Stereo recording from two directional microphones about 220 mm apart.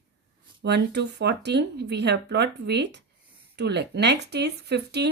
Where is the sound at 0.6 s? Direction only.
50° right (ahead or behind).